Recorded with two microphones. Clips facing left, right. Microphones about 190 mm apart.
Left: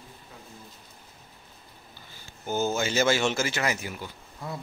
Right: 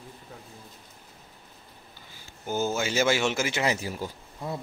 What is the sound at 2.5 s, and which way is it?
A man's voice, 10° right (ahead or behind).